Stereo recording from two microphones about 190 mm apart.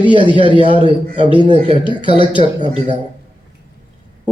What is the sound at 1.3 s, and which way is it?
Speech, 25° left (ahead or behind).